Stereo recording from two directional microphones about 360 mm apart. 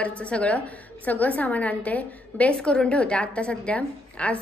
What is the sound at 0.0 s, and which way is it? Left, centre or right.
A woman's voice, centre.